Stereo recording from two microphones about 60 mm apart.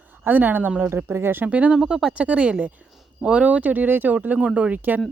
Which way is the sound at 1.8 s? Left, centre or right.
Centre.